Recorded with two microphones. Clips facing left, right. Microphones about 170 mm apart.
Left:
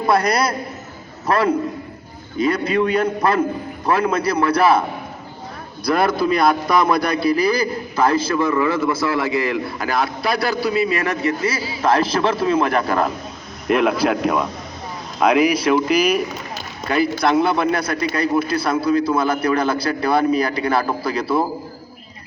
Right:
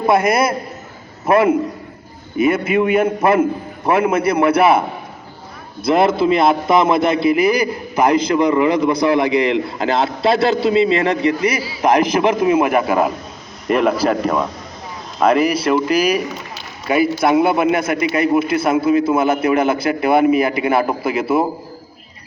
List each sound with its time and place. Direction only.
0.0 s a man's voice: 20° right (ahead or behind)
2.4 s a man's voice: 20° right (ahead or behind)
5.8 s a man's voice: 25° right (ahead or behind)